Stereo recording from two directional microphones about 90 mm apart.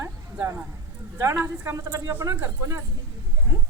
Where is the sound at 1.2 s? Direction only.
30° right (ahead or behind).